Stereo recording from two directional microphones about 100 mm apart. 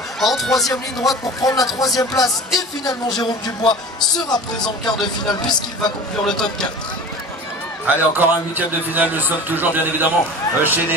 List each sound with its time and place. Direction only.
0.2 s speech: centre (ahead or behind)
1.0 s speech: 35° left (ahead or behind)
6.2 s a man's voice: 5° left (ahead or behind)
7.8 s a man's voice: 20° right (ahead or behind)